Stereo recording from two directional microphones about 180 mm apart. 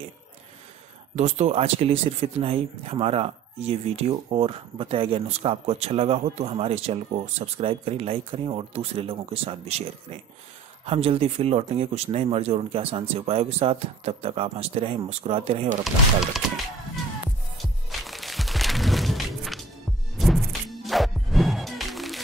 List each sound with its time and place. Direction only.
1.1 s speech: 40° right (ahead or behind)
10.9 s speech: 30° right (ahead or behind)
16.3 s speech: centre (ahead or behind)
17.6 s music: centre (ahead or behind)